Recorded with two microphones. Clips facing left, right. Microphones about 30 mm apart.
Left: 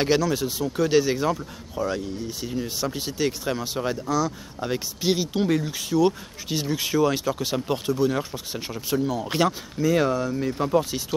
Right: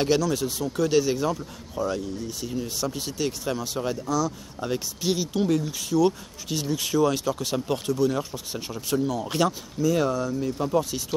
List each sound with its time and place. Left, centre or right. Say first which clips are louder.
0.0 s speech: left 1 dB; centre
9.0 s speech: left 1 dB; centre
9.3 s speech: left 1 dB; left